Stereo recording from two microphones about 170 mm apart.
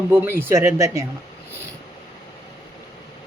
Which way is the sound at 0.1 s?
15° right (ahead or behind).